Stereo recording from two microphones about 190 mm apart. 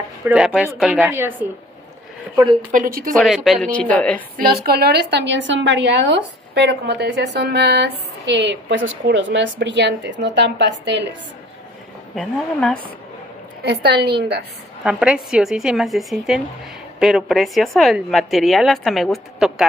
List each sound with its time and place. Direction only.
0.2 s a woman's voice: 5° right (ahead or behind)
2.7 s speech: 45° right (ahead or behind)
3.2 s a woman's voice: centre (ahead or behind)
4.4 s a woman's voice: 55° right (ahead or behind)
12.2 s a woman's voice: 5° left (ahead or behind)
13.6 s a woman's voice: 60° right (ahead or behind)
14.8 s a woman's voice: 5° right (ahead or behind)